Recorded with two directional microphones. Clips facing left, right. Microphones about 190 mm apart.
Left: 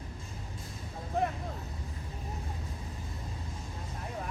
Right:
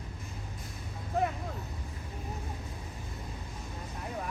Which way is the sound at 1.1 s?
Centre (ahead or behind).